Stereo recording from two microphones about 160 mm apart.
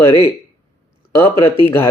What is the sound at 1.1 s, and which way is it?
Speech, 15° left (ahead or behind).